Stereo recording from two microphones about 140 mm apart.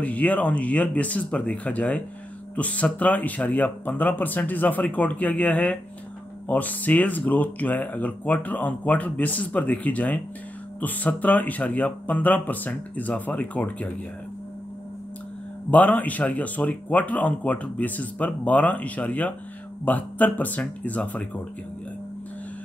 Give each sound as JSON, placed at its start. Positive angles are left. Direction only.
{"t": 0.0, "sound": "speech", "side_deg": 10}
{"t": 15.7, "sound": "speech", "side_deg": 10}